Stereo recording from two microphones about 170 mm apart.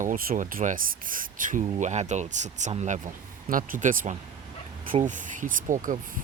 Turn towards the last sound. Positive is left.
turn(degrees=-50)  # may be behind; listen again after turning